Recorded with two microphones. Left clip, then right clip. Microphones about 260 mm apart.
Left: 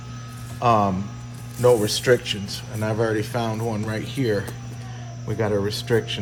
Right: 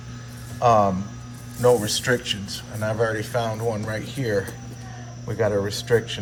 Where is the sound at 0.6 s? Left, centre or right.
Centre.